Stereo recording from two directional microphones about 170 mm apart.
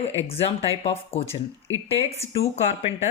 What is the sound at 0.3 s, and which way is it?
A woman's voice, 35° left (ahead or behind).